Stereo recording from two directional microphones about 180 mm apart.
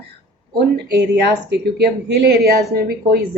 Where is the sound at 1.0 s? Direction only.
70° right (ahead or behind).